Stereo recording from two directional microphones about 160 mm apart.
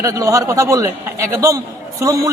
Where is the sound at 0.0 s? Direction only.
20° right (ahead or behind).